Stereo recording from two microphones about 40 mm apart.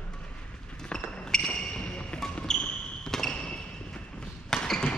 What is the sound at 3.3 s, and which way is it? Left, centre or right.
Basketball bounce, left.